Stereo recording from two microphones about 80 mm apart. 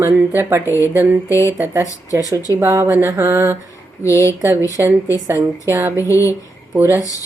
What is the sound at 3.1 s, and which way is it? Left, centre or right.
Speech, right.